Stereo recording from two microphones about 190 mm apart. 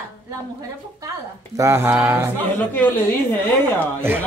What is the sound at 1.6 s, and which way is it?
Mantra, 15° right (ahead or behind).